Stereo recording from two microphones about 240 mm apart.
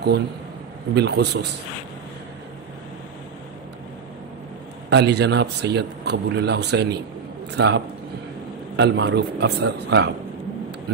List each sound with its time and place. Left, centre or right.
0.9 s a man's voice: right
4.8 s a man's voice: right